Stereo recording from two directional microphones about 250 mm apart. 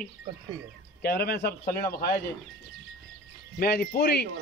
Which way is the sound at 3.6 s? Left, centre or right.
Left.